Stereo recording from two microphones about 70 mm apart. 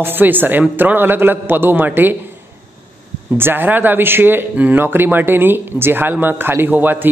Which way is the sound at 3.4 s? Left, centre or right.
Right.